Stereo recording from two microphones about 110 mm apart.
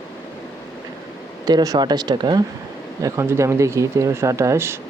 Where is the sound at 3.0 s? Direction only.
25° right (ahead or behind).